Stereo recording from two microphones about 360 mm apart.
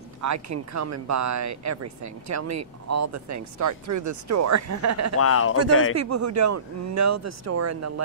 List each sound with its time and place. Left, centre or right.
0.2 s speech: right
5.2 s a man's voice: left
5.6 s speech: right